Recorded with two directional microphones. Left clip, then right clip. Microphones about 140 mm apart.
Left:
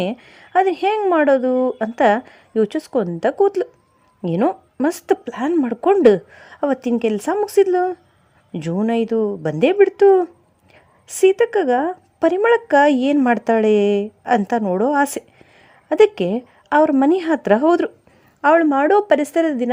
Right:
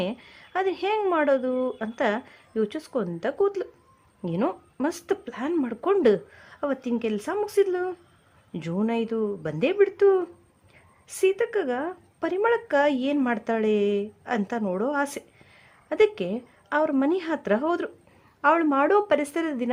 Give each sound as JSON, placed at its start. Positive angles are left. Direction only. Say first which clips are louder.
{"t": 0.0, "sound": "a woman's voice", "louder": "left 6 dB", "side_deg": 40}
{"t": 18.4, "sound": "speech", "louder": "left 7 dB", "side_deg": 30}